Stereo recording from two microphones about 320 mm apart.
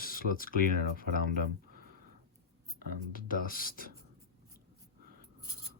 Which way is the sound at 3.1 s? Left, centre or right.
Left.